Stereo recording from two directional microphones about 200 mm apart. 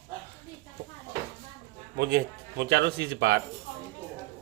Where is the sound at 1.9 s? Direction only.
55° right (ahead or behind).